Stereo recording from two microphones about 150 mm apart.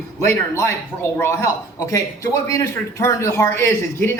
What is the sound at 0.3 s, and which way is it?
A man's voice, 20° left (ahead or behind).